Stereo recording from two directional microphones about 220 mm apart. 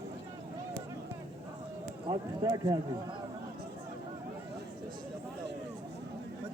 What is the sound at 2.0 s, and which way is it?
Speech, 20° right (ahead or behind).